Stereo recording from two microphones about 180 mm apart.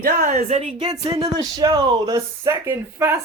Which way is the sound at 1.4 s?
20° right (ahead or behind).